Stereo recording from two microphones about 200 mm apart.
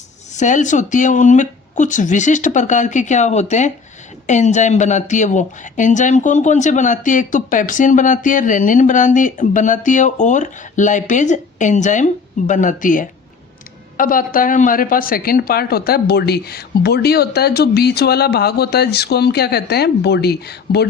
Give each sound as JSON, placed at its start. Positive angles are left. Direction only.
{"t": 0.3, "sound": "a woman's voice", "side_deg": 40}